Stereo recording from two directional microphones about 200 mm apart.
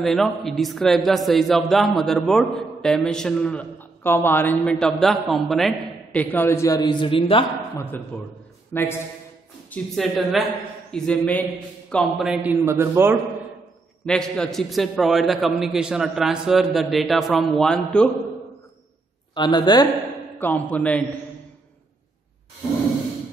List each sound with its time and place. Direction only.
0.0 s a man's voice: centre (ahead or behind); by 7.4 s 25° left (ahead or behind)
7.8 s a man's voice: 10° left (ahead or behind); by 13.2 s 10° right (ahead or behind)
14.0 s a man's voice: 5° left (ahead or behind)
19.3 s a woman's voice: 20° left (ahead or behind)
20.3 s a man's voice: 10° left (ahead or behind)